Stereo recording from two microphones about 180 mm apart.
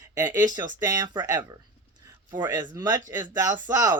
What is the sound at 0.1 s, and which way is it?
Speech, 20° right (ahead or behind).